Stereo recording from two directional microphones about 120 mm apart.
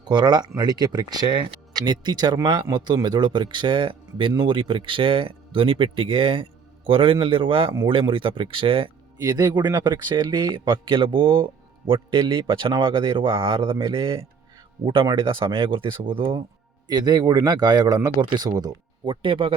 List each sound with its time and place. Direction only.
0.0 s speech: 40° right (ahead or behind)
9.2 s speech: 35° right (ahead or behind)
16.9 s speech: 35° right (ahead or behind)